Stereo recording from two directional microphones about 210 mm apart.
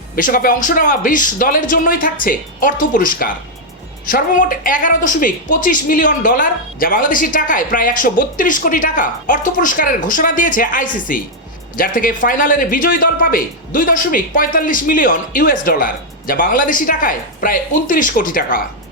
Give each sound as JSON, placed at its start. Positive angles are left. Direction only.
{"t": 0.2, "sound": "speech", "side_deg": 40}